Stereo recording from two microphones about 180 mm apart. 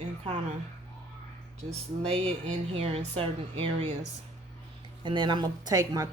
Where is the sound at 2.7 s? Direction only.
35° right (ahead or behind).